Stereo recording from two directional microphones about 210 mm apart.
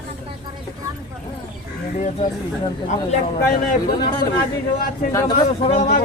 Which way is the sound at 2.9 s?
35° left (ahead or behind).